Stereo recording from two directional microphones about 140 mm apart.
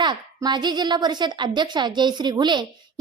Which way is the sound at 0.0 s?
30° right (ahead or behind).